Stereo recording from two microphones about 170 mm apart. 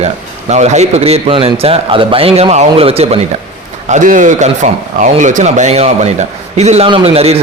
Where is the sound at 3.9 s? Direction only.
50° right (ahead or behind).